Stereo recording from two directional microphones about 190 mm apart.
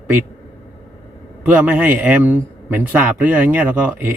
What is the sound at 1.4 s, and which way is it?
A man's voice, 10° right (ahead or behind).